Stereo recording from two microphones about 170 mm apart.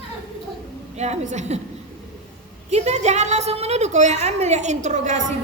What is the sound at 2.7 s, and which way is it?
A woman's voice, 40° right (ahead or behind).